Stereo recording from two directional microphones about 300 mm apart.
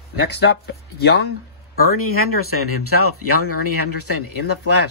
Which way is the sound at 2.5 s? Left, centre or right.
Left.